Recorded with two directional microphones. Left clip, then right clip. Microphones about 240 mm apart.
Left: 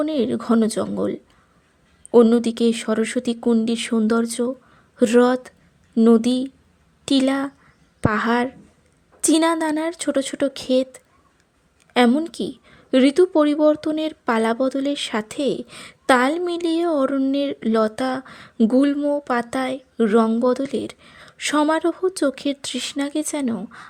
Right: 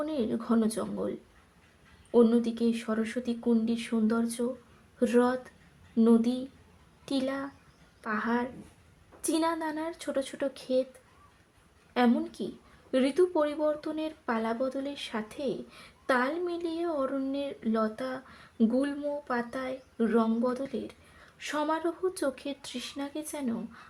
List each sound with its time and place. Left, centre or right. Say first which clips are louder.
0.0 s a woman's voice: left 10 dB; left
2.1 s a woman's voice: left 9 dB; left
11.9 s a woman's voice: left 10 dB; left